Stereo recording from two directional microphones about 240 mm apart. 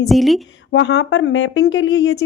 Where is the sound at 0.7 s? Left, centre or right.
Left.